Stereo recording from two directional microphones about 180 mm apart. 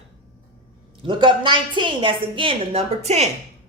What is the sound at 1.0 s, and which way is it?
A woman's voice, 25° right (ahead or behind).